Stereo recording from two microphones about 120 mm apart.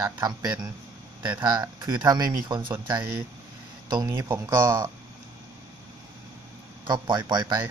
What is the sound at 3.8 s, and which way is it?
Speech, 35° right (ahead or behind).